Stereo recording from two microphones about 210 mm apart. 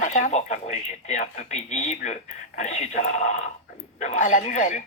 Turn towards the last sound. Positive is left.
turn(degrees=35)  # may be behind; listen again after turning